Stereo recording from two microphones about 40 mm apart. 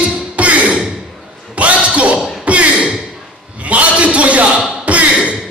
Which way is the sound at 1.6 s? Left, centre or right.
Right.